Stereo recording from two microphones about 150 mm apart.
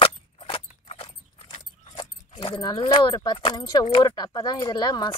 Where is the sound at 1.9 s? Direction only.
30° left (ahead or behind).